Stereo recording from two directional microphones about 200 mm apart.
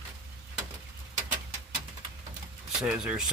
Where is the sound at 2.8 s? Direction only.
5° right (ahead or behind).